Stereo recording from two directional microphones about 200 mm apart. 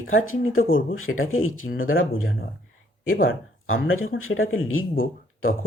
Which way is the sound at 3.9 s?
90° left.